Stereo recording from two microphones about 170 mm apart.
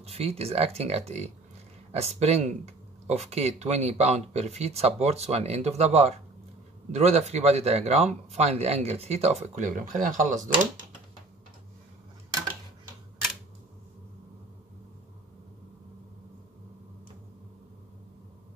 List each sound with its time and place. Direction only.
0.0 s speech: 35° right (ahead or behind)